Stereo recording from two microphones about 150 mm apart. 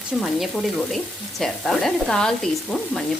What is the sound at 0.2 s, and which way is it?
Speech, centre (ahead or behind).